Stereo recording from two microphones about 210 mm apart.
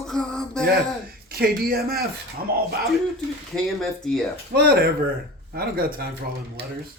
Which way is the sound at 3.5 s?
Centre (ahead or behind).